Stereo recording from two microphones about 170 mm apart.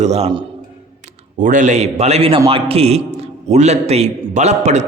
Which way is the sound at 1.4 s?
50° right (ahead or behind).